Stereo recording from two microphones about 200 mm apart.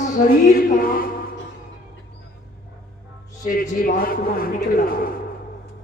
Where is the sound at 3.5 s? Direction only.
40° left (ahead or behind).